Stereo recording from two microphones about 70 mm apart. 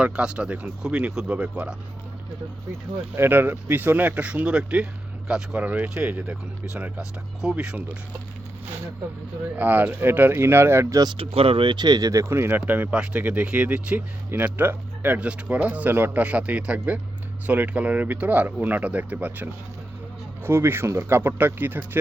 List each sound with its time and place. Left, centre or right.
0.0 s speech: centre
3.2 s speech: right
9.6 s speech: right
11.6 s speech: right
12.2 s speech: right
12.5 s speech: right
14.3 s speech: right
20.4 s speech: right